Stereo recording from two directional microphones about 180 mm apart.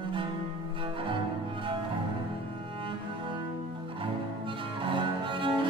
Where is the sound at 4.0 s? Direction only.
30° right (ahead or behind).